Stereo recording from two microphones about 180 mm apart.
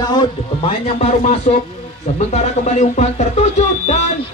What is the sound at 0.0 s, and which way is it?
Speech, 25° left (ahead or behind).